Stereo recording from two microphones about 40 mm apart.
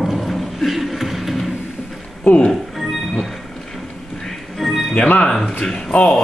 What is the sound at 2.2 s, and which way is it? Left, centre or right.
Music, left.